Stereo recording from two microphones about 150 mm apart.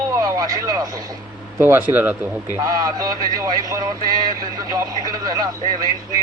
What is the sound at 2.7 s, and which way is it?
Speech, 25° right (ahead or behind).